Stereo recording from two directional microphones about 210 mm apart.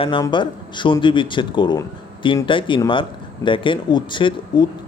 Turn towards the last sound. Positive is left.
turn(degrees=25)  # may be behind; listen again after turning